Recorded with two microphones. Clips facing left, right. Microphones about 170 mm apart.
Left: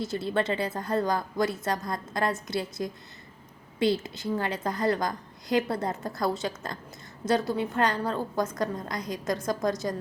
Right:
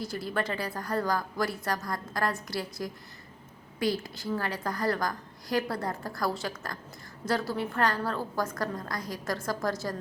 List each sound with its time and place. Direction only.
0.0 s a woman's voice: 25° left (ahead or behind)